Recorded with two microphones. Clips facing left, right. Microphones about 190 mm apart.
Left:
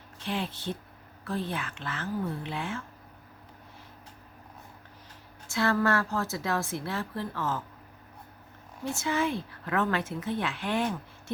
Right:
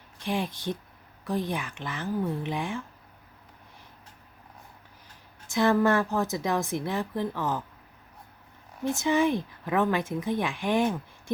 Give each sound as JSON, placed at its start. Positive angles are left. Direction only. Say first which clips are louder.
{"t": 0.2, "sound": "a woman's voice", "louder": "right 3 dB", "side_deg": -15}
{"t": 5.5, "sound": "a woman's voice", "louder": "right 4 dB", "side_deg": -15}
{"t": 8.8, "sound": "a woman's voice", "louder": "right 5 dB", "side_deg": -15}